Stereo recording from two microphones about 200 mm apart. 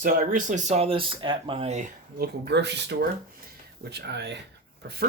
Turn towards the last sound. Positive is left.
turn(degrees=-55)  # may be behind; listen again after turning